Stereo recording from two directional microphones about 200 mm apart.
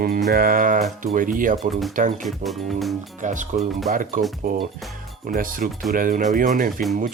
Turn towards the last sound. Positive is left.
turn(degrees=-40)  # may be behind; listen again after turning